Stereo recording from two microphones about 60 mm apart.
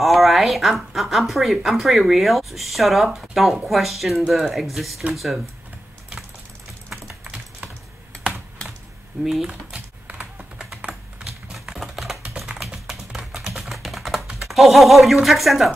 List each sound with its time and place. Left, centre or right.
0.0 s speech: centre
9.2 s speech: centre
10.8 s typing: right
11.5 s typewriter: centre
12.5 s typing: centre
15.2 s speech: centre